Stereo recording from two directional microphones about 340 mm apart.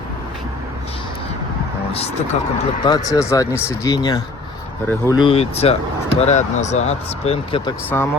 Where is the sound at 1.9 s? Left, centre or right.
Centre.